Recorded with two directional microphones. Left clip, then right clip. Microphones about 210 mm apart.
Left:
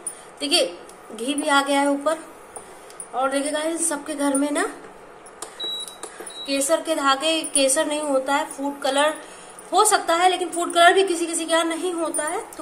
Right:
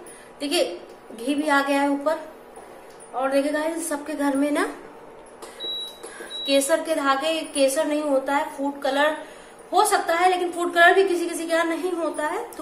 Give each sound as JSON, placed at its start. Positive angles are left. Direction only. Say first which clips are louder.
{"t": 0.4, "sound": "a woman's voice", "louder": "left 3 dB", "side_deg": 30}
{"t": 3.2, "sound": "a woman's voice", "louder": "even", "side_deg": 25}
{"t": 6.4, "sound": "a woman's voice", "louder": "right 2 dB", "side_deg": 10}
{"t": 6.9, "sound": "a woman's voice", "louder": "left 2 dB", "side_deg": 30}